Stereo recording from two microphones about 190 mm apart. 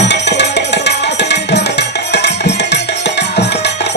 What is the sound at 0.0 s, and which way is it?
Music, 65° left (ahead or behind).